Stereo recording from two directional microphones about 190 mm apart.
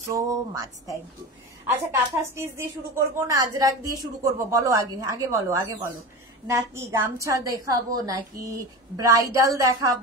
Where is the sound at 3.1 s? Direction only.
20° right (ahead or behind).